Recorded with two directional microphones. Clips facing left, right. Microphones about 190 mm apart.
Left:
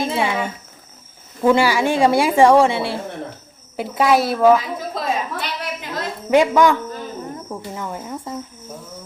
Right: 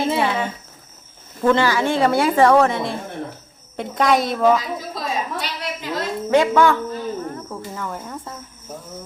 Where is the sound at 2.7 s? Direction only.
80° left.